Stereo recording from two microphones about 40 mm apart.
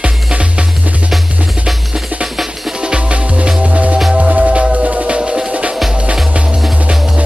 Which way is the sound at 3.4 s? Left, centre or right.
Right.